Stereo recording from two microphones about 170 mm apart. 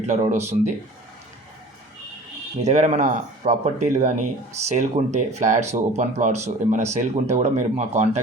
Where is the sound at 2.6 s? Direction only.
40° right (ahead or behind).